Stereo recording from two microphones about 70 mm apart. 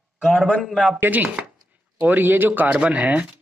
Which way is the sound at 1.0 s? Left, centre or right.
Right.